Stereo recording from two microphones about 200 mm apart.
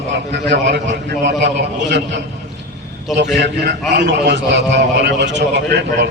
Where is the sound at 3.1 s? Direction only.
60° right (ahead or behind).